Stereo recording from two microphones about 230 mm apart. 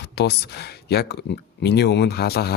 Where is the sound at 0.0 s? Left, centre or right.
Left.